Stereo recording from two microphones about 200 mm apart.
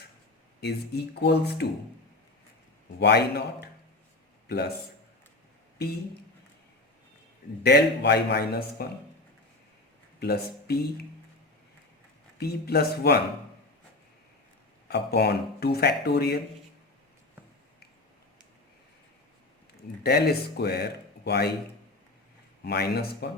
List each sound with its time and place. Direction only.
0.6 s a man's voice: 55° left (ahead or behind)
3.0 s a man's voice: 55° left (ahead or behind)
7.6 s a man's voice: 55° left (ahead or behind)
10.2 s speech: 55° left (ahead or behind)
12.4 s speech: 50° left (ahead or behind)
14.8 s speech: 55° left (ahead or behind)
20.0 s speech: 50° left (ahead or behind)
22.6 s speech: 55° left (ahead or behind)